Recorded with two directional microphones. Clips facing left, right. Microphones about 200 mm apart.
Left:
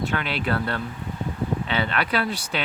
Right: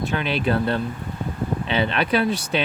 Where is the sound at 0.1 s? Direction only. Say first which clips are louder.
Right 4 dB; 20° right (ahead or behind).